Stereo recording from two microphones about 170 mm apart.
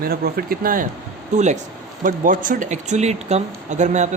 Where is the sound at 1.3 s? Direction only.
45° right (ahead or behind).